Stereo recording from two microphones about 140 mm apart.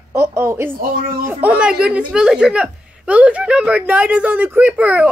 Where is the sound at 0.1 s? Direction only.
20° right (ahead or behind).